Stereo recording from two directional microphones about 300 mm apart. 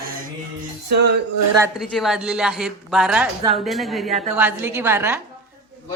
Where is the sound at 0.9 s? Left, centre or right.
Right.